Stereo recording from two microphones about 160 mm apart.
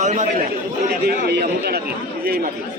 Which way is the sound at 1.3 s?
80° right.